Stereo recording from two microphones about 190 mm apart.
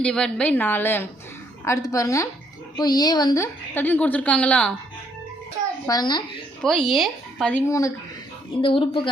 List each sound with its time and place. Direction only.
0.0 s a woman's voice: 5° left (ahead or behind)
5.8 s a woman's voice: 20° left (ahead or behind)
6.6 s speech: centre (ahead or behind)
7.7 s a woman's voice: 15° left (ahead or behind)
8.6 s a woman's voice: 25° left (ahead or behind)